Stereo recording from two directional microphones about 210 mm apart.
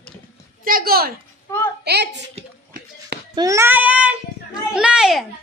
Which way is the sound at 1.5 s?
10° left (ahead or behind).